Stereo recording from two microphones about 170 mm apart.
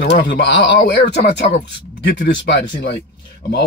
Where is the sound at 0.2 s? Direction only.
90° left.